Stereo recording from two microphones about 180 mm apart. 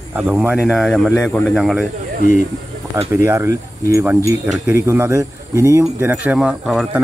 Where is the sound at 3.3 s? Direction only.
15° right (ahead or behind).